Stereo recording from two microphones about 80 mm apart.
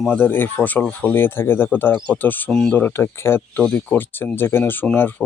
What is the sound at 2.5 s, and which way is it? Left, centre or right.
Speech, centre.